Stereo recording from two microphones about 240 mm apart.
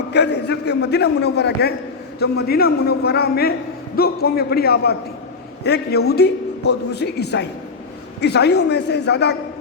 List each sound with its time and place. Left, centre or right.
0.1 s a man's voice: left